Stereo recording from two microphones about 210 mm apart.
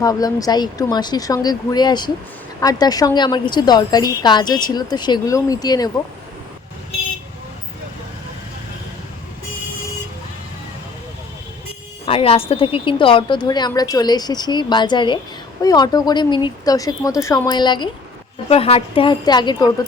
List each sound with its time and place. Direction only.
0.0 s a woman's voice: 15° left (ahead or behind)
12.0 s a woman's voice: 25° left (ahead or behind)